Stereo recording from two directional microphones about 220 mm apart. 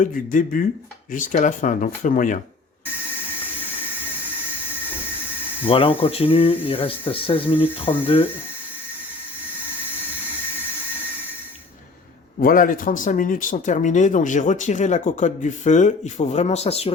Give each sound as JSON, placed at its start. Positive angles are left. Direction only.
{"t": 0.0, "sound": "speech", "side_deg": 40}
{"t": 5.6, "sound": "speech", "side_deg": 25}
{"t": 12.4, "sound": "speech", "side_deg": 40}